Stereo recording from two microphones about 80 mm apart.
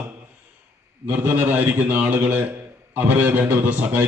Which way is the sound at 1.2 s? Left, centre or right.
Centre.